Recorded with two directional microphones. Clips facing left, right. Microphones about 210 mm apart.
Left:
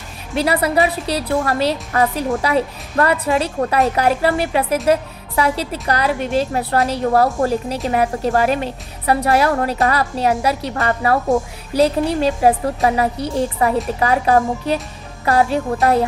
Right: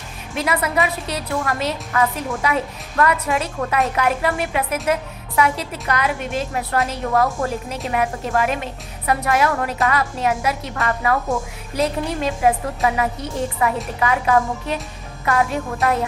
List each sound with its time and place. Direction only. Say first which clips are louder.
0.3 s a woman's voice: left 4 dB; 35° left (ahead or behind)